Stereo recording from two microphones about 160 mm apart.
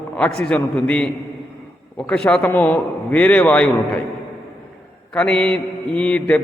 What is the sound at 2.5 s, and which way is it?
A man's voice, 15° left (ahead or behind).